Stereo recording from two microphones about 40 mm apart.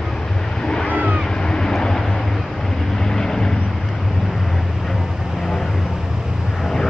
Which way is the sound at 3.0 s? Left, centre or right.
Centre.